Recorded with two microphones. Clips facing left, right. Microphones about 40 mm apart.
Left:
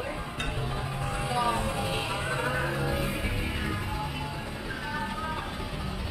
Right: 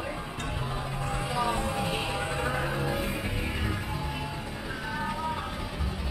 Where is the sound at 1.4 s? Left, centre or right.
Centre.